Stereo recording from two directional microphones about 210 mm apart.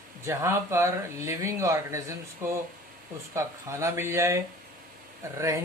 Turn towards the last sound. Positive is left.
turn(degrees=-15)  # may be behind; listen again after turning